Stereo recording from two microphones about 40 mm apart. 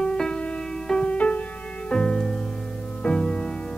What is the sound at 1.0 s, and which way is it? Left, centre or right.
Music, left.